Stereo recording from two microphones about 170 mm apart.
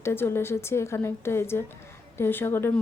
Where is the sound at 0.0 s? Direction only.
15° left (ahead or behind).